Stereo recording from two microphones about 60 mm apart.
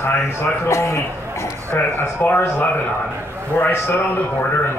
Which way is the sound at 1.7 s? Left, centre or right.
Left.